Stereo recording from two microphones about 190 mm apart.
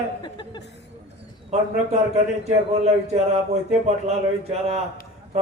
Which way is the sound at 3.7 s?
35° right (ahead or behind).